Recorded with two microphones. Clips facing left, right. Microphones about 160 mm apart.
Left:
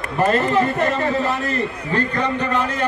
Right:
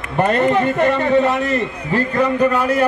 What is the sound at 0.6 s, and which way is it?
Speech, 35° left (ahead or behind).